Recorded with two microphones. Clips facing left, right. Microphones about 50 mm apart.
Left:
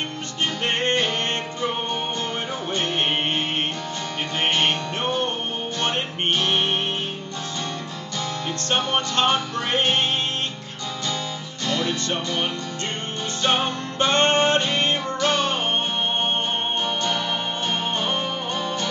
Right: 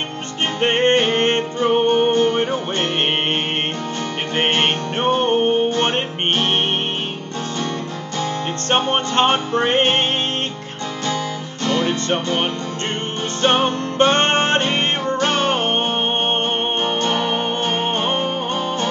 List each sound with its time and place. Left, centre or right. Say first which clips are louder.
0.6 s music: right 8 dB; right
4.4 s music: right 3 dB; right
8.2 s music: right 5 dB; right
11.6 s music: right 5 dB; right
16.8 s music: right 5 dB; right